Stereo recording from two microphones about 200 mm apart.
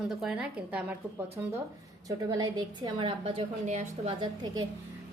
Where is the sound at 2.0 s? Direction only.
20° right (ahead or behind).